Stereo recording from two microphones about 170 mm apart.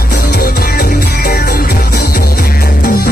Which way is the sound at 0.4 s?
65° left (ahead or behind).